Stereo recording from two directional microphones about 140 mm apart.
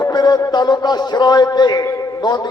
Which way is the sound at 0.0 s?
30° left (ahead or behind).